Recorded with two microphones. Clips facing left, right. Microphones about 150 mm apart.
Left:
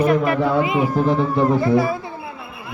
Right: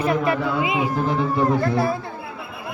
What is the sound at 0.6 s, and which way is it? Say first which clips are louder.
Speech: left 4 dB; 15° right (ahead or behind).